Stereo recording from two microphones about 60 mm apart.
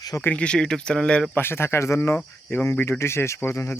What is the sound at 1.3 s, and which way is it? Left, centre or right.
Speech, left.